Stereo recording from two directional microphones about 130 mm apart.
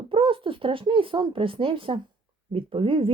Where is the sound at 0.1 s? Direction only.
45° right (ahead or behind).